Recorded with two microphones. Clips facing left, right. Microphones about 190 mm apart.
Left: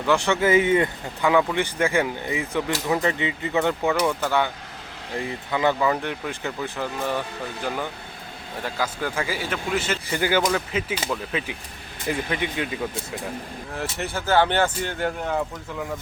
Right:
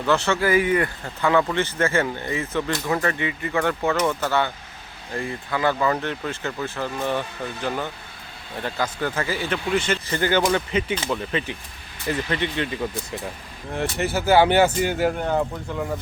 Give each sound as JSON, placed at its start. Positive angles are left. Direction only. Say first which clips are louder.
{"t": 0.1, "sound": "speech", "louder": "left 1 dB", "side_deg": 15}
{"t": 1.2, "sound": "speech", "louder": "even", "side_deg": 10}
{"t": 8.6, "sound": "speech", "louder": "right 2 dB", "side_deg": 5}
{"t": 13.9, "sound": "speech", "louder": "right 3 dB", "side_deg": -5}